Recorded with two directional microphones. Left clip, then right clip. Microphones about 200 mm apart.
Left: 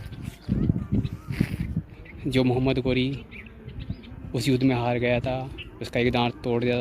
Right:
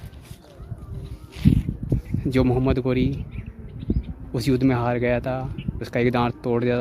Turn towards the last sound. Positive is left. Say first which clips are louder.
# right 2 dB
turn(degrees=-10)  # may be behind; listen again after turning